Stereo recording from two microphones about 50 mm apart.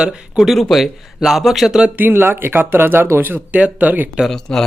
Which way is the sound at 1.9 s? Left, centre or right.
Right.